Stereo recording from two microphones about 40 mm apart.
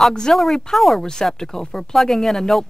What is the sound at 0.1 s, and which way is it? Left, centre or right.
Speech, centre.